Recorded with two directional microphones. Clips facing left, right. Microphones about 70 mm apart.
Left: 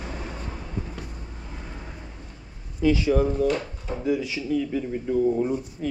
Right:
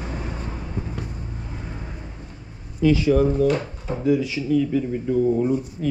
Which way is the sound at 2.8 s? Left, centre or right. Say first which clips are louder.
Right 3 dB; centre.